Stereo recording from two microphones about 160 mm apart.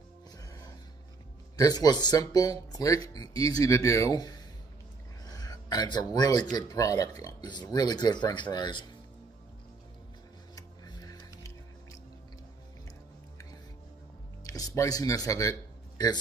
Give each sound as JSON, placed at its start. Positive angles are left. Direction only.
{"t": 0.4, "sound": "music", "side_deg": 20}
{"t": 1.6, "sound": "speech", "side_deg": 25}
{"t": 5.2, "sound": "a sound", "side_deg": 25}
{"t": 6.5, "sound": "speech", "side_deg": 20}
{"t": 10.5, "sound": "music", "side_deg": 25}
{"t": 14.4, "sound": "speech", "side_deg": 20}